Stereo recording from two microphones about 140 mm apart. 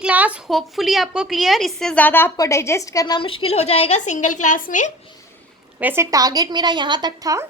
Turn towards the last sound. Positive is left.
turn(degrees=-25)  # may be behind; listen again after turning